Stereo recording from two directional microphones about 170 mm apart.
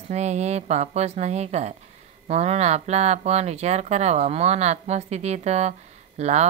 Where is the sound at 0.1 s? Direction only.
40° right (ahead or behind).